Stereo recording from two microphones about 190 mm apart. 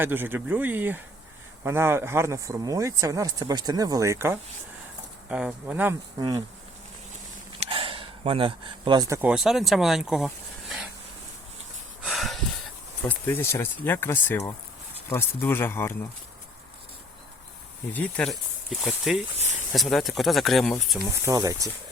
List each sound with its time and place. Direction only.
0.0 s speech: 10° right (ahead or behind)
6.1 s insect: 20° right (ahead or behind)
7.6 s a sound: 30° right (ahead or behind); by 9.3 s 15° right (ahead or behind)
9.3 s speech: centre (ahead or behind)
10.2 s a sound: centre (ahead or behind)
12.0 s a sound: centre (ahead or behind)
13.1 s speech: 10° left (ahead or behind)
17.9 s speech: 5° left (ahead or behind)
21.0 s speech: 15° right (ahead or behind)